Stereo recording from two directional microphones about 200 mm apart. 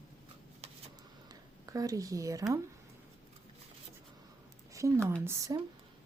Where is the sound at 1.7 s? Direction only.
15° right (ahead or behind).